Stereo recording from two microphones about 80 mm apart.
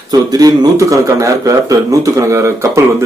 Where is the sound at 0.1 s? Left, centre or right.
Right.